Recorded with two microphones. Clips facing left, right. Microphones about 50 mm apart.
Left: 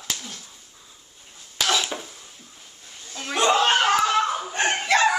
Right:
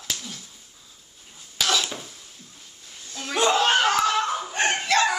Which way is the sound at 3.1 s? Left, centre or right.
Centre.